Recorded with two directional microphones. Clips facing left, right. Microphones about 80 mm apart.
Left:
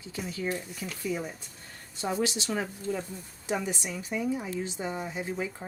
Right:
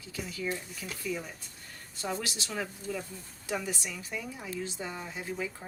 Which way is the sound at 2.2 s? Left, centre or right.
Left.